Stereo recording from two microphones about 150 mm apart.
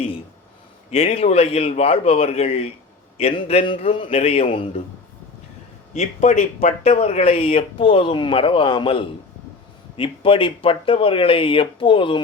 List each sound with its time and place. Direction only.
0.9 s speech: 40° left (ahead or behind)
5.9 s speech: 50° left (ahead or behind); by 12.2 s 35° left (ahead or behind)